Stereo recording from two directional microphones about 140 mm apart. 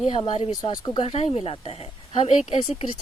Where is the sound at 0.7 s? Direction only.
25° left (ahead or behind).